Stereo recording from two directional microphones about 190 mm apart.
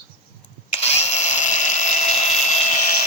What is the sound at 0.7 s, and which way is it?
Tools, 35° left (ahead or behind).